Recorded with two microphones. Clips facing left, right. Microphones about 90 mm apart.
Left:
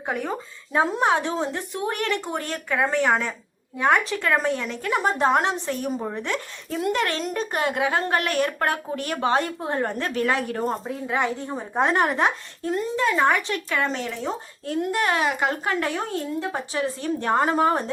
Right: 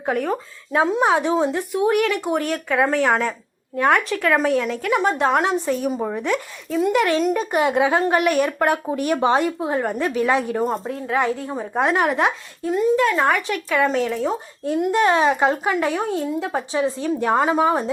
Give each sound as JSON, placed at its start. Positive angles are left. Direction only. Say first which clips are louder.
{"t": 0.0, "sound": "speech", "louder": "right 5 dB", "side_deg": 0}
{"t": 1.1, "sound": "speech", "louder": "right 5 dB", "side_deg": -15}
{"t": 5.6, "sound": "speech", "louder": "right 5 dB", "side_deg": -15}
{"t": 6.7, "sound": "speech", "louder": "right 5 dB", "side_deg": 0}
{"t": 6.9, "sound": "speech", "louder": "right 9 dB", "side_deg": -10}
{"t": 7.6, "sound": "speech", "louder": "right 5 dB", "side_deg": -20}
{"t": 9.6, "sound": "speech", "louder": "right 4 dB", "side_deg": -5}
{"t": 10.6, "sound": "speech", "louder": "right 3 dB", "side_deg": 0}
{"t": 14.6, "sound": "speech", "louder": "right 6 dB", "side_deg": -15}